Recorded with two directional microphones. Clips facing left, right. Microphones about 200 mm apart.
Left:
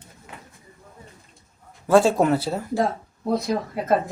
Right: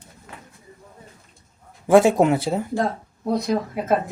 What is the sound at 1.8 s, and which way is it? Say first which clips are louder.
Speech: right 2 dB; 20° right (ahead or behind).